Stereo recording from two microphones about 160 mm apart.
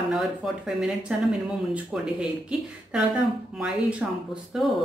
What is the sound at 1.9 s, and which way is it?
Speech, 5° right (ahead or behind).